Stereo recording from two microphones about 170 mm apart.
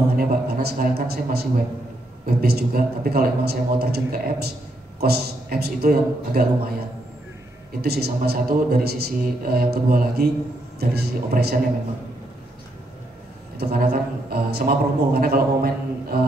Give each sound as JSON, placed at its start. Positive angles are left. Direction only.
{"t": 0.1, "sound": "a man's voice", "side_deg": -65}
{"t": 7.8, "sound": "a man's voice", "side_deg": -65}
{"t": 13.6, "sound": "a man's voice", "side_deg": -65}